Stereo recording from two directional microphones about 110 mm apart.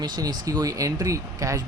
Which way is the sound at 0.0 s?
35° right (ahead or behind).